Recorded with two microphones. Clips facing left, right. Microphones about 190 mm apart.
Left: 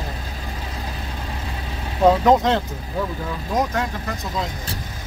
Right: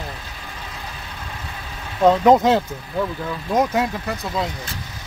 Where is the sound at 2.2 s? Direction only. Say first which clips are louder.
Right 2 dB; 5° right (ahead or behind).